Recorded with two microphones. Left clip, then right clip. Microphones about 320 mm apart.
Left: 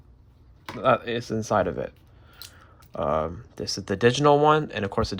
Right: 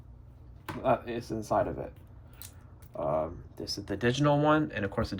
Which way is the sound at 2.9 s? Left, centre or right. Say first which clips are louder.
Left 5 dB; left.